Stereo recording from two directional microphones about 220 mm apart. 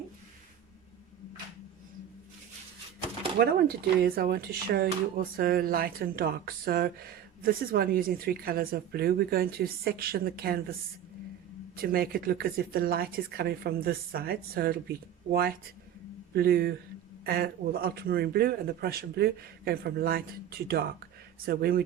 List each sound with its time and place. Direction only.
3.3 s speech: 45° right (ahead or behind)
11.8 s speech: 45° right (ahead or behind)